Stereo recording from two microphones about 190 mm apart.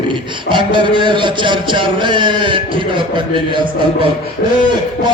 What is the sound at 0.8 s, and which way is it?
Speech, 25° right (ahead or behind).